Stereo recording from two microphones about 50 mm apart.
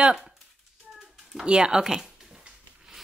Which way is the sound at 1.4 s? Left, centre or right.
Centre.